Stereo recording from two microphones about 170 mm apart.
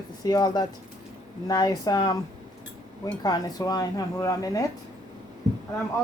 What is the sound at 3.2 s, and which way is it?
Speech, 20° left (ahead or behind).